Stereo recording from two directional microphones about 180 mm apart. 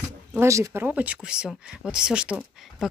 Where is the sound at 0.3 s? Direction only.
15° right (ahead or behind).